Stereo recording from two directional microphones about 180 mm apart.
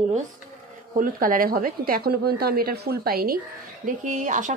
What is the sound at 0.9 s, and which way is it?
A woman's voice, 50° right (ahead or behind).